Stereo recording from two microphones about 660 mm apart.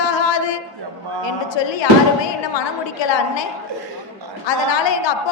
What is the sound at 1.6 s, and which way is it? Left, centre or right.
A woman's voice, left.